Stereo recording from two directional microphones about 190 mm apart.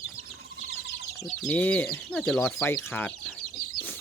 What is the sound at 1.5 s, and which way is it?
Speech, 10° left (ahead or behind).